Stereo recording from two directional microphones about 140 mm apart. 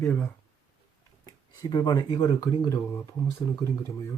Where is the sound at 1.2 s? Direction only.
30° left (ahead or behind).